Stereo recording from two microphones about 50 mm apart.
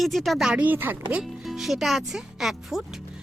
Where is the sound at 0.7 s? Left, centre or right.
Right.